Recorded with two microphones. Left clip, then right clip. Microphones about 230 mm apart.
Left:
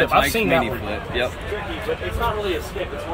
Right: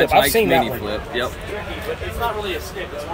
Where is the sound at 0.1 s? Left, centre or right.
Centre.